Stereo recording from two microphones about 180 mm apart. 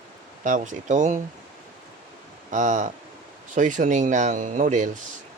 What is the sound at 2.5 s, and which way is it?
Speech, 45° right (ahead or behind).